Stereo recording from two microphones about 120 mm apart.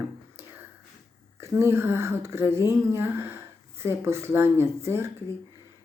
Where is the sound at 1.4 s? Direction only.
20° right (ahead or behind).